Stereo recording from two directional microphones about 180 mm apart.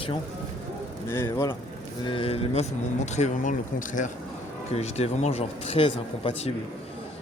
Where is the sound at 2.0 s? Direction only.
30° left (ahead or behind).